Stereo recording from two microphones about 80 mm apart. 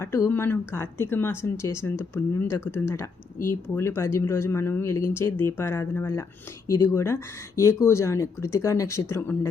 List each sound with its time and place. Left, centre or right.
0.0 s speech: left